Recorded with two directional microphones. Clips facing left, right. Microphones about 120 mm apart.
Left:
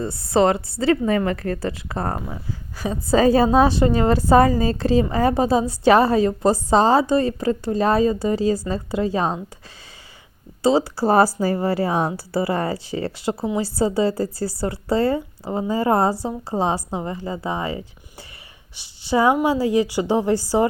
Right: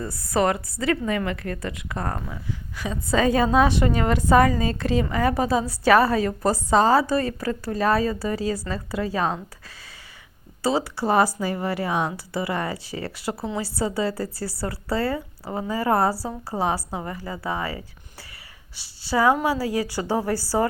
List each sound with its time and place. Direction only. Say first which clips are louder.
0.0 s a woman's voice: left 5 dB; 25° left (ahead or behind)
10.6 s a woman's voice: left 5 dB; 25° left (ahead or behind)